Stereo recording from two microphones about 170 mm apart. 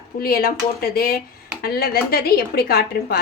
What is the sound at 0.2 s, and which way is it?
A woman's voice, 60° left (ahead or behind).